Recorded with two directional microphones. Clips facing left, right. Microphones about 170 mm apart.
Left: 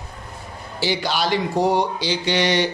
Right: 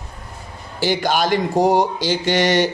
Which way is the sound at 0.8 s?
50° right (ahead or behind).